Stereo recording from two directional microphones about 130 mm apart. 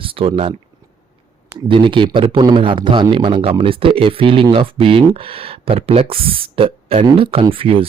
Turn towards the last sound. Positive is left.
turn(degrees=-45)  # may be behind; listen again after turning